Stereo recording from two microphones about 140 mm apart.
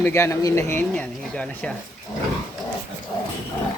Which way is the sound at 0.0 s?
20° left (ahead or behind).